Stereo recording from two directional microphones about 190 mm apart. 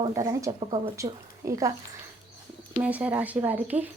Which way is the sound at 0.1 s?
15° right (ahead or behind).